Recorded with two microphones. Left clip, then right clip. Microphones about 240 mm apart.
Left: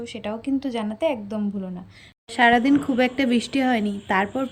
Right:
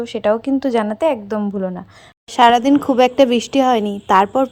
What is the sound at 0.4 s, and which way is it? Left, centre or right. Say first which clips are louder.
Speech: right 9 dB; centre.